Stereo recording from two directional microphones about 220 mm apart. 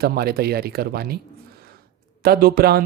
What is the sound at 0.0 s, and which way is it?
Speech, 45° right (ahead or behind).